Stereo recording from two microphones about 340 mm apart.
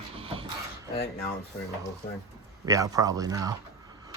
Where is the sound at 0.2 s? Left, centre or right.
Centre.